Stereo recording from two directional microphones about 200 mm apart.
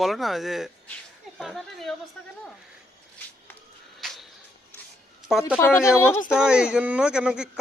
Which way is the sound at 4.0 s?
Centre (ahead or behind).